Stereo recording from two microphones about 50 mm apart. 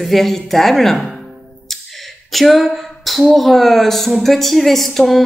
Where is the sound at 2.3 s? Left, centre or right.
Centre.